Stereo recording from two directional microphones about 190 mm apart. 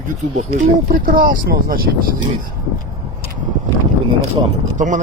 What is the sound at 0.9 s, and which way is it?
Speech, 50° right (ahead or behind).